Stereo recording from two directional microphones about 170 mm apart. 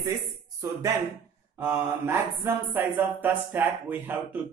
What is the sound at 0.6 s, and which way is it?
Speech, 20° right (ahead or behind).